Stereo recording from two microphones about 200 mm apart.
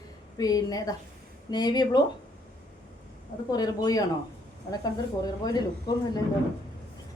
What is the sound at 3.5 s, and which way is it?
Speech, 20° left (ahead or behind).